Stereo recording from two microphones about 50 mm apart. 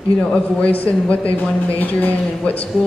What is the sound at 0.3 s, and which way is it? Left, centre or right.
Speech, left.